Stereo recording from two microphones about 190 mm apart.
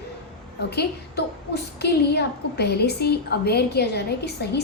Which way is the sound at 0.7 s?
60° left (ahead or behind).